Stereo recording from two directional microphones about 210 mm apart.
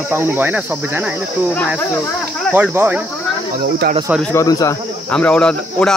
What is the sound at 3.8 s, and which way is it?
Speech, 55° right (ahead or behind).